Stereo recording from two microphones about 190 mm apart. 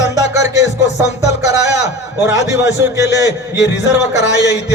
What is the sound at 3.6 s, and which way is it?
Music, 65° left (ahead or behind).